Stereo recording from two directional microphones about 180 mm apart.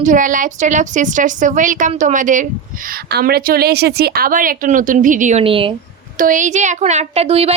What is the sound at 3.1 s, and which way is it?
Speech, 55° right (ahead or behind).